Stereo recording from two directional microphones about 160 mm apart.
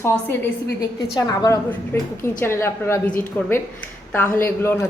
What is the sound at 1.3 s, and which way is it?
A woman's voice, 25° left (ahead or behind).